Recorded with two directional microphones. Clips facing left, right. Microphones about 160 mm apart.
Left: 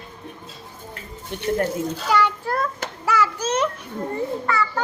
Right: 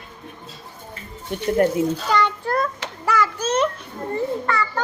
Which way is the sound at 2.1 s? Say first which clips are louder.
Even; 5° left (ahead or behind).